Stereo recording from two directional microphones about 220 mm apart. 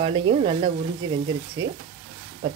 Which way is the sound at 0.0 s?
25° right (ahead or behind).